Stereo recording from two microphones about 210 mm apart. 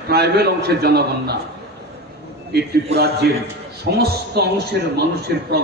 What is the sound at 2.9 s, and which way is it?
A man's voice, 50° right (ahead or behind).